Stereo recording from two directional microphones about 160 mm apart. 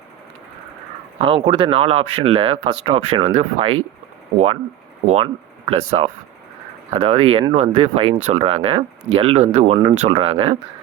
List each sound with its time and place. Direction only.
1.2 s speech: 35° right (ahead or behind)
5.0 s speech: 40° right (ahead or behind)